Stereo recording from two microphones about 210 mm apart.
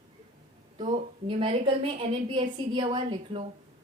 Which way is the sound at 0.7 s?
25° right (ahead or behind).